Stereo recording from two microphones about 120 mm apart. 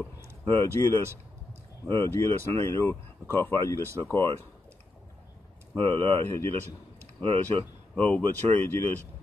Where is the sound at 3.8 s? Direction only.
25° right (ahead or behind).